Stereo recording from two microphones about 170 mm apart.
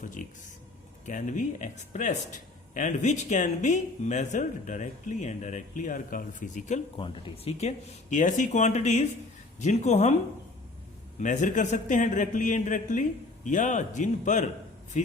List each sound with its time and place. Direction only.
0.0 s speech: 50° left (ahead or behind)
6.9 s speech: 30° left (ahead or behind)
8.1 s speech: 50° left (ahead or behind)
11.2 s speech: 50° left (ahead or behind)